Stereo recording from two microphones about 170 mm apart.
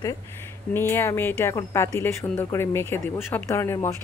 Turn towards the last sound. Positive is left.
turn(degrees=15)  # may be behind; listen again after turning